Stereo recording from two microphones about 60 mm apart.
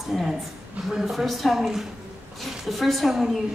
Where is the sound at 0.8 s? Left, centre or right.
Centre.